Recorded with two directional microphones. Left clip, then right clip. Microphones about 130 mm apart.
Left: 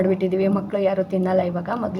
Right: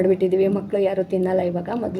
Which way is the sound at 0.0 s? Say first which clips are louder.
Right 2 dB; 35° right (ahead or behind).